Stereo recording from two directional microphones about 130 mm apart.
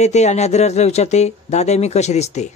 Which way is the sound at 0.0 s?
60° left (ahead or behind).